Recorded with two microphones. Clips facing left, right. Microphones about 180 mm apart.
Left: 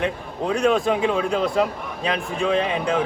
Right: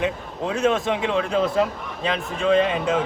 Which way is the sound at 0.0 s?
Centre (ahead or behind).